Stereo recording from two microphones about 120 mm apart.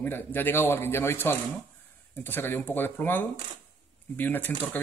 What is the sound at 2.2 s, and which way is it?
Speech, 15° left (ahead or behind).